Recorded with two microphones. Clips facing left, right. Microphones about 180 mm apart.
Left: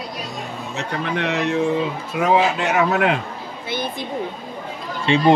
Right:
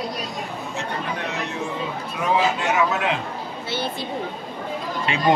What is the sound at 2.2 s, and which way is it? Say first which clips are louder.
Speech: left 4 dB; 65° left (ahead or behind).